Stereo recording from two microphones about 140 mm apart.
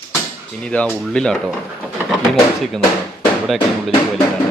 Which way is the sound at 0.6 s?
10° left (ahead or behind).